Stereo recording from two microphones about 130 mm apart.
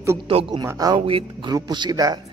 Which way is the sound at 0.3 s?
45° right (ahead or behind).